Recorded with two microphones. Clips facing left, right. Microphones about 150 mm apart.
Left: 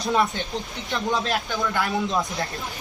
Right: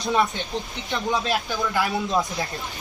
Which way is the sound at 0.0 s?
Centre (ahead or behind).